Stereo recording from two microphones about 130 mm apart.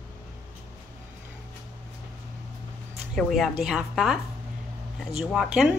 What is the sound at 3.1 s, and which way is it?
A woman's voice, centre (ahead or behind).